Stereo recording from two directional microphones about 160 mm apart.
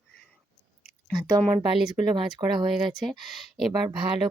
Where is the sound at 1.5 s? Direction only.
30° right (ahead or behind).